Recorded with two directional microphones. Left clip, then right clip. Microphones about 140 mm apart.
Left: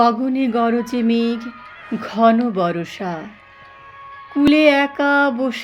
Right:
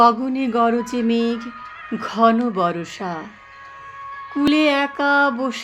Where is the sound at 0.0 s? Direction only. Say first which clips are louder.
Right 1 dB; 20° left (ahead or behind).